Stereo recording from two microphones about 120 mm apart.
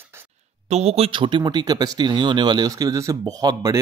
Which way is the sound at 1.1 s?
45° right (ahead or behind).